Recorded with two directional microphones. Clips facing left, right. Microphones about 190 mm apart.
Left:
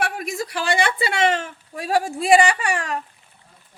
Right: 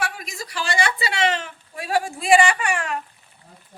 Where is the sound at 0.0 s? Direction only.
60° left (ahead or behind); by 3.0 s 35° left (ahead or behind).